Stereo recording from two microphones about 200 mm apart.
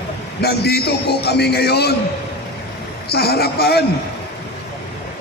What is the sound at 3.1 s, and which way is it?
Speech, 50° left (ahead or behind).